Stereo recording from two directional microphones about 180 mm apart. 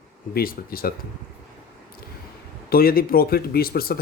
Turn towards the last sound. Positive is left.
turn(degrees=55)  # may be behind; listen again after turning